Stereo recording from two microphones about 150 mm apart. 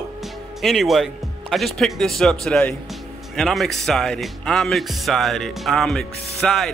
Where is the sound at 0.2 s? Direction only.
Centre (ahead or behind).